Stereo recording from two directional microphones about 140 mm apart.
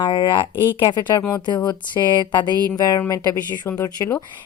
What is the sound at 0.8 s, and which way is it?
A woman's voice, 30° left (ahead or behind).